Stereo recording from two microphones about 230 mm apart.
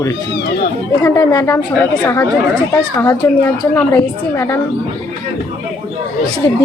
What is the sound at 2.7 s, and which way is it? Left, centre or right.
A woman's voice, centre.